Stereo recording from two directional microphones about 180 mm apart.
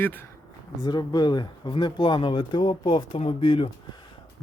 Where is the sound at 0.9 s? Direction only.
25° left (ahead or behind).